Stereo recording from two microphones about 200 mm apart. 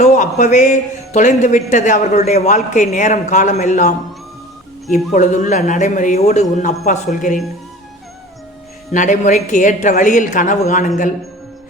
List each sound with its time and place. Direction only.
0.0 s a man's voice: 35° left (ahead or behind)
8.9 s a man's voice: 40° left (ahead or behind)